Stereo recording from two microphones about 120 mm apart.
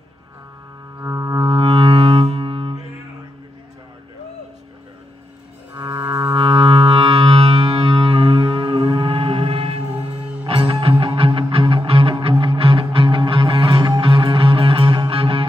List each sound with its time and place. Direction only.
0.9 s music: 25° right (ahead or behind)
1.4 s music: 45° right (ahead or behind)
5.9 s music: 30° right (ahead or behind)
6.3 s music: 50° right (ahead or behind)
10.0 s music: 40° right (ahead or behind)